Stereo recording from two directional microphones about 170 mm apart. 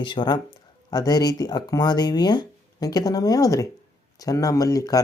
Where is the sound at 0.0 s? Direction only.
25° left (ahead or behind).